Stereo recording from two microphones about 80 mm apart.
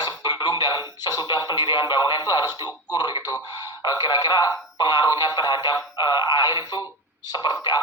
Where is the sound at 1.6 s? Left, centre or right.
Left.